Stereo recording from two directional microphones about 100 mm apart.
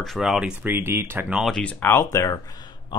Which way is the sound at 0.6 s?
20° right (ahead or behind).